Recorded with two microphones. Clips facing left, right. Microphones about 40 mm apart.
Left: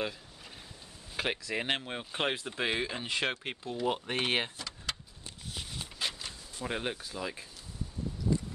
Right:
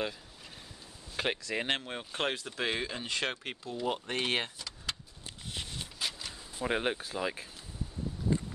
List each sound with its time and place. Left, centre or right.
1.1 s speech: centre
5.9 s a sound: centre
6.5 s speech: centre